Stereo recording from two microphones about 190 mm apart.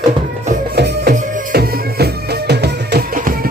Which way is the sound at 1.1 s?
45° right (ahead or behind).